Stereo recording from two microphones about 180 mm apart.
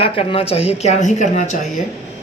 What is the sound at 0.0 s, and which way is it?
A woman's voice, 30° left (ahead or behind).